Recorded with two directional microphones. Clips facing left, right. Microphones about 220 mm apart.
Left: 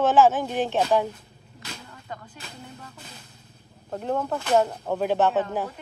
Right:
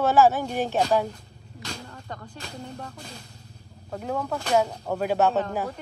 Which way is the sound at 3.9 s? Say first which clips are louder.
Left 2 dB; centre (ahead or behind).